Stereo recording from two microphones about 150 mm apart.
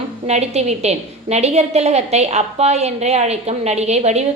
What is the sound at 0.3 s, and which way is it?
A woman's voice, 45° right (ahead or behind).